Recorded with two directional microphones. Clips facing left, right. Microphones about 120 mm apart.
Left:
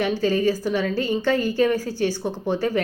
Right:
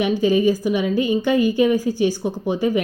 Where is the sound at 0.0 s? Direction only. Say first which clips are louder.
Right 4 dB; 15° right (ahead or behind).